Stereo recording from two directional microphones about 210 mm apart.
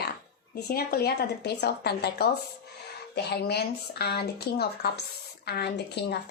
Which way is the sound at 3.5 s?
50° left (ahead or behind).